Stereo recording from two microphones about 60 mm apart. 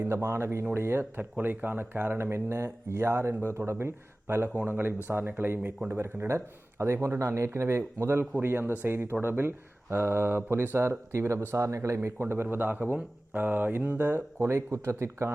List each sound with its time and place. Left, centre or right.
0.1 s speech: right
1.2 s speech: right
2.1 s speech: right
6.2 s speech: right
12.2 s speech: right